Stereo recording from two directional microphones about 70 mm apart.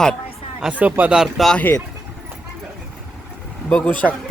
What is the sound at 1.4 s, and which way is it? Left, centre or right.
Speech, centre.